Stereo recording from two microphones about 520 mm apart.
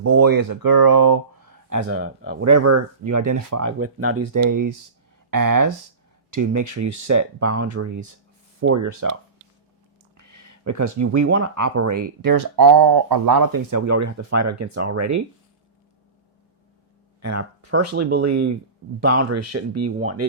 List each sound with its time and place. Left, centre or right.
0.1 s speech: right
1.9 s speech: right
10.2 s speech: right
17.2 s speech: right